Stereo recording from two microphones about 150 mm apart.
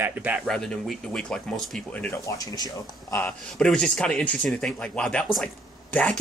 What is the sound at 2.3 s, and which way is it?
Speech, 25° left (ahead or behind).